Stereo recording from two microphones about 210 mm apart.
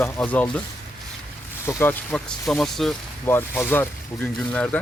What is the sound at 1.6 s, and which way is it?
Speech, 10° left (ahead or behind).